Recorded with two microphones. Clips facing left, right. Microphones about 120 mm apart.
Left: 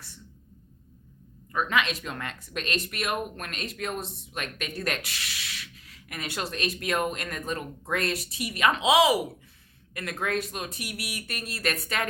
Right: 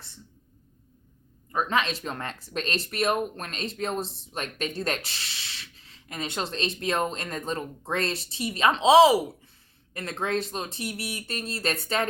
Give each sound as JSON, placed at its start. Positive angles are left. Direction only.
{"t": 1.5, "sound": "speech", "side_deg": -30}